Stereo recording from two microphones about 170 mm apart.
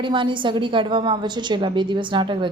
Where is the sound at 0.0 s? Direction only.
30° right (ahead or behind).